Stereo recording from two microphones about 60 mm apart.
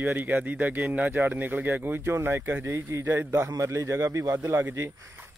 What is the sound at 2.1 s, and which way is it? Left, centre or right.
Speech, right.